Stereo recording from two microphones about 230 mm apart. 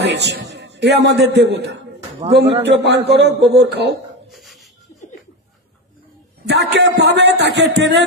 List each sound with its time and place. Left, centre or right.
0.0 s a man's voice: right
4.3 s a sound: centre
6.4 s a man's voice: right